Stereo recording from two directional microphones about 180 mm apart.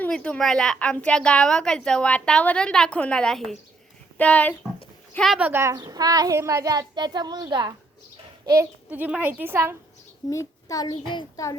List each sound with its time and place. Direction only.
0.0 s a woman's voice: 5° left (ahead or behind)
5.5 s a child's voice: 15° right (ahead or behind)
8.4 s a child's voice: 15° right (ahead or behind)
10.2 s a child's voice: 20° left (ahead or behind)